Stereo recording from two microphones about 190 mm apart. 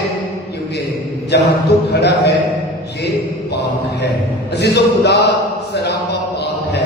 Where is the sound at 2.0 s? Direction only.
60° left (ahead or behind).